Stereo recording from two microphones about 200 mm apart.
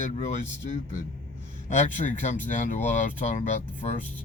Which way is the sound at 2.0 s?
40° left (ahead or behind).